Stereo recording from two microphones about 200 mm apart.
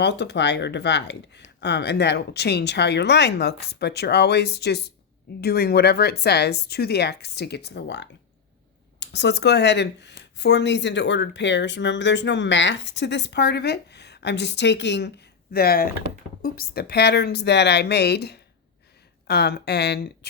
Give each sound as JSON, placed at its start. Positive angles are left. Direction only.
{"t": 0.0, "sound": "speech", "side_deg": 60}
{"t": 15.5, "sound": "speech", "side_deg": 50}